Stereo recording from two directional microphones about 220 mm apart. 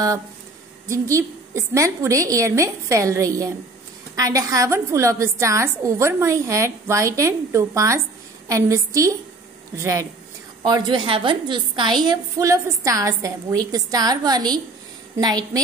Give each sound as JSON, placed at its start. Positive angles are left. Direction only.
{"t": 0.8, "sound": "a woman's voice", "side_deg": -15}